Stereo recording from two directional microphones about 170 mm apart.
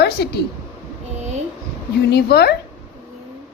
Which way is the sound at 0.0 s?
70° left (ahead or behind).